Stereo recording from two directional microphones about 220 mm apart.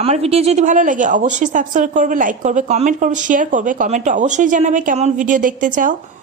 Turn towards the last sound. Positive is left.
turn(degrees=-35)  # may be behind; listen again after turning